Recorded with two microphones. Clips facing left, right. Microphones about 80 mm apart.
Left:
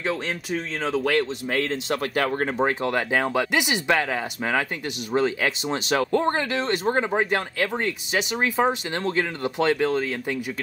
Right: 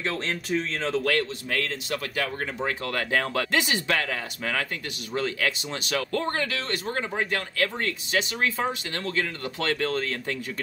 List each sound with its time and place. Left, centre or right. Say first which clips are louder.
0.0 s speech: left 2 dB; centre
1.1 s speech: left 4 dB; left
2.1 s speech: left 9 dB; left
2.8 s speech: left 4 dB; centre